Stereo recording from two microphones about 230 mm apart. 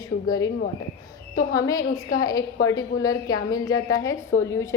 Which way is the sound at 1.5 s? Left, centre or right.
Centre.